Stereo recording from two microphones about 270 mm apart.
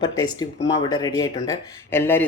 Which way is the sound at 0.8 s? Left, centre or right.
Centre.